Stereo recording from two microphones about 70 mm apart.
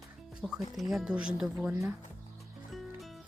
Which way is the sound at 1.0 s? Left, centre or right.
Centre.